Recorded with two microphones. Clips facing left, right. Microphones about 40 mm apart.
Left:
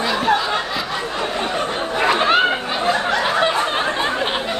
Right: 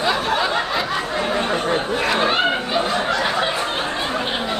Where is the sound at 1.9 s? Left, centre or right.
Left.